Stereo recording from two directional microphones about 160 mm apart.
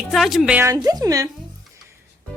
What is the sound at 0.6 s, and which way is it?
Speech, 20° right (ahead or behind).